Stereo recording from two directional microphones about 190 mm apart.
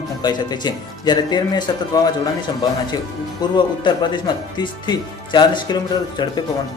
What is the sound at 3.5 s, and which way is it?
Speech, 25° left (ahead or behind).